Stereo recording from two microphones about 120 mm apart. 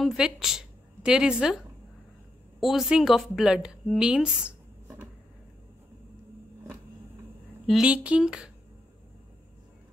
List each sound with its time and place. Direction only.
0.0 s a woman's voice: 5° right (ahead or behind)
2.6 s a woman's voice: 5° right (ahead or behind)
7.6 s speech: 5° right (ahead or behind)